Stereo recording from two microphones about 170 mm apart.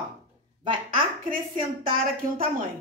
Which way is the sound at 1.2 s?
55° right (ahead or behind).